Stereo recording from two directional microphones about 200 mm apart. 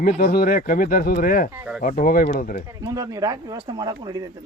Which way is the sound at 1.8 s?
45° left (ahead or behind).